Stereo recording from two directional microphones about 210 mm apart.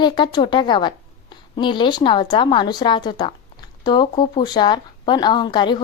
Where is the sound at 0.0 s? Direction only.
20° left (ahead or behind).